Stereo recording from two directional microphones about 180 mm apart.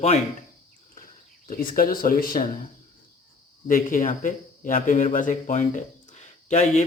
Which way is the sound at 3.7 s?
50° left (ahead or behind).